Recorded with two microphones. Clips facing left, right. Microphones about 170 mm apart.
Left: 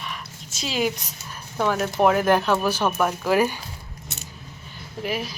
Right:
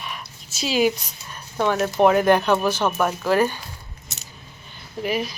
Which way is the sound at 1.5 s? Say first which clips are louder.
Right 2 dB; centre (ahead or behind).